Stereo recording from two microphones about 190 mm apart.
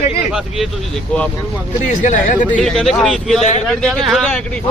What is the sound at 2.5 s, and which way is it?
Speech, 5° left (ahead or behind).